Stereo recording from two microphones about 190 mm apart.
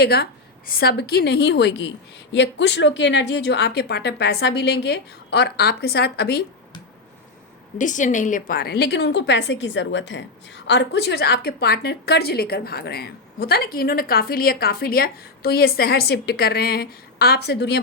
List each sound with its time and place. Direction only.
0.0 s a woman's voice: 55° left (ahead or behind)
7.8 s a woman's voice: 40° left (ahead or behind); by 17.7 s 60° left (ahead or behind)